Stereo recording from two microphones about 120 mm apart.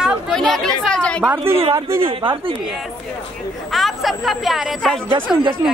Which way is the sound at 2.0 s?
45° right (ahead or behind).